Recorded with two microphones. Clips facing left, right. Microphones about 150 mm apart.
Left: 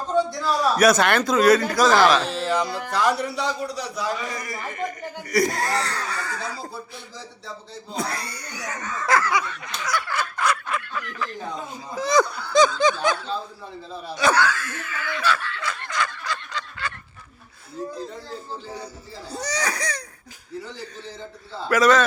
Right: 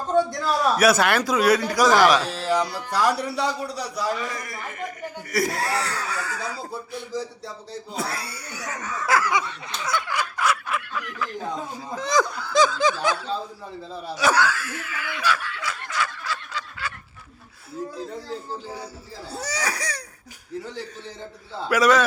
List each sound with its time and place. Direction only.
0.4 s speech: 5° right (ahead or behind)
2.4 s music: 10° right (ahead or behind)
3.0 s a man's voice: 5° right (ahead or behind)
7.9 s speech: 5° right (ahead or behind)
9.3 s a sound: 25° right (ahead or behind)
10.1 s fowl: 10° right (ahead or behind)
11.9 s snicker: centre (ahead or behind)
14.2 s laughter: 10° right (ahead or behind)
19.3 s speech: 5° right (ahead or behind)
21.7 s speech: 10° right (ahead or behind)